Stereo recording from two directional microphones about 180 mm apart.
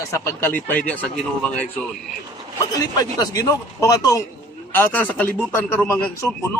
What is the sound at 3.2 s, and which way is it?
Speech, 20° left (ahead or behind).